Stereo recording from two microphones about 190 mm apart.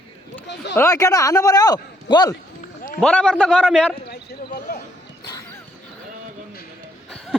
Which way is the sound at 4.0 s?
55° left (ahead or behind).